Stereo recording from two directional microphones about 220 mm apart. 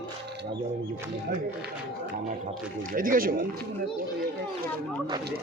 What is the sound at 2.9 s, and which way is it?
Speech, 40° right (ahead or behind).